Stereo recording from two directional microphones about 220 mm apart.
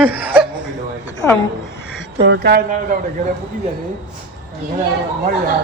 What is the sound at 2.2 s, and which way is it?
Speech, 50° right (ahead or behind).